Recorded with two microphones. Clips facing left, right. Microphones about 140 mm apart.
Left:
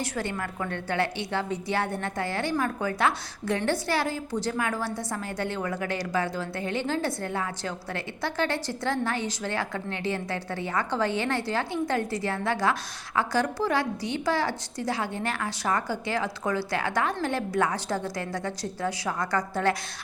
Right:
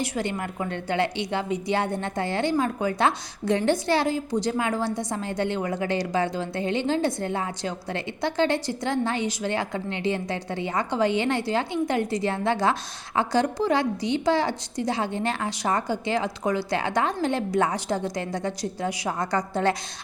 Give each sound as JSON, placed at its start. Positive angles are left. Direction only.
{"t": 0.0, "sound": "a woman's voice", "side_deg": -15}